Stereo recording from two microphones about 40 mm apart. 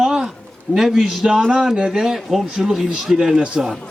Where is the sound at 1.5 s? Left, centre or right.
Centre.